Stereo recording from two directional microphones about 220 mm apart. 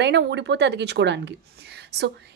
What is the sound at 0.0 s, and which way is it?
A woman's voice, 50° right (ahead or behind).